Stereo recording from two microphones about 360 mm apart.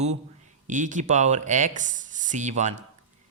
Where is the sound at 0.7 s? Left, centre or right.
Right.